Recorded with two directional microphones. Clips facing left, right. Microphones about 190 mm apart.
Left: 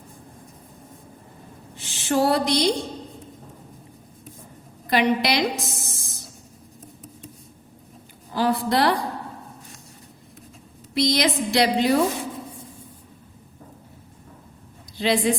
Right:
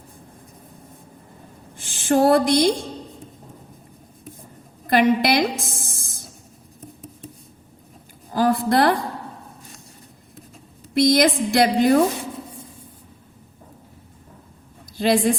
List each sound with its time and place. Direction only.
1.7 s speech: 50° right (ahead or behind)
4.9 s a woman's voice: 50° right (ahead or behind)
8.3 s speech: 45° right (ahead or behind)
10.9 s a woman's voice: 50° right (ahead or behind)
14.9 s speech: 50° right (ahead or behind)